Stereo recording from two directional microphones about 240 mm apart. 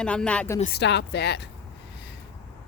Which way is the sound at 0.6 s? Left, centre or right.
Left.